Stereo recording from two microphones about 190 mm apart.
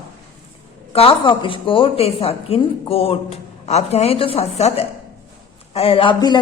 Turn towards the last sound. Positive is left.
turn(degrees=25)  # may be behind; listen again after turning